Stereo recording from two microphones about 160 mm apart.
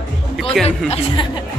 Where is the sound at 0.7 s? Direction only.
40° left (ahead or behind).